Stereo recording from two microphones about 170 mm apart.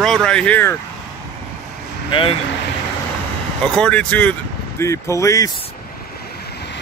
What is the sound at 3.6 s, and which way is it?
Speech, 5° left (ahead or behind).